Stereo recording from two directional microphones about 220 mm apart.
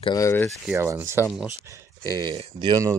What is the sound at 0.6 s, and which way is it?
Speech, 10° right (ahead or behind).